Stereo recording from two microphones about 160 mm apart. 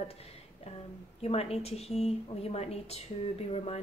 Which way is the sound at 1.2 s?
40° left (ahead or behind).